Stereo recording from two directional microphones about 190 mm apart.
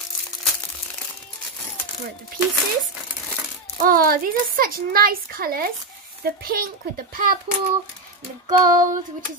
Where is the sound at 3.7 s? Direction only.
50° right (ahead or behind).